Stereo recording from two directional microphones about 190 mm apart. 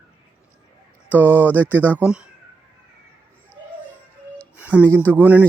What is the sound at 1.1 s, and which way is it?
Speech, 10° right (ahead or behind).